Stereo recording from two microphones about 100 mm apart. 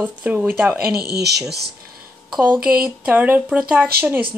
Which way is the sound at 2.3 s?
10° right (ahead or behind).